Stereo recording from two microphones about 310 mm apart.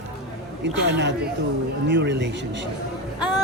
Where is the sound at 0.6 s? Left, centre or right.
Right.